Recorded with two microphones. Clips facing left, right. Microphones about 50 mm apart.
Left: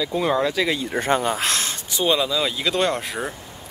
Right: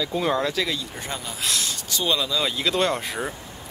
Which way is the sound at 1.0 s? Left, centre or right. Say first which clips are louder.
Left 11 dB; left.